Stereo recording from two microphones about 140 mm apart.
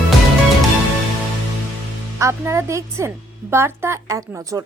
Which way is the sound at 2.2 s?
20° right (ahead or behind).